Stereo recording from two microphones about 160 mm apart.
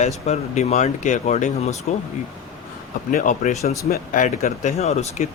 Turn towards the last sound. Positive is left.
turn(degrees=45)  # may be behind; listen again after turning